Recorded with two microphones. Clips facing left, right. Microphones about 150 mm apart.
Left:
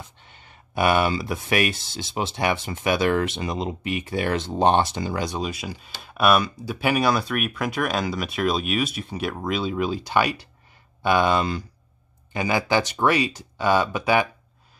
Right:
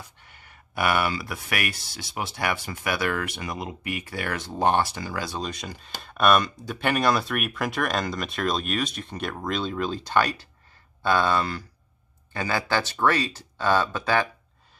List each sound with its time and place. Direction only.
0.0 s speech: 25° left (ahead or behind)
5.5 s speech: 5° left (ahead or behind)